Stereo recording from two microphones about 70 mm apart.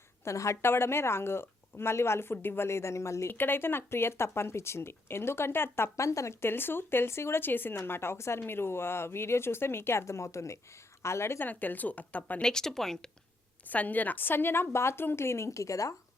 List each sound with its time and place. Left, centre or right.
0.3 s speech: left
3.3 s speech: left
11.4 s speech: left
12.4 s speech: centre
13.7 s speech: left